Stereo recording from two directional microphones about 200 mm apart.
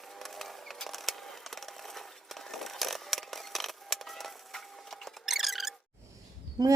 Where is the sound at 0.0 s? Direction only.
Centre (ahead or behind).